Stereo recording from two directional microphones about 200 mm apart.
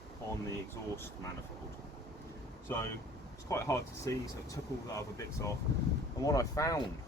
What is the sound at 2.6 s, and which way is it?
Speech, 10° left (ahead or behind).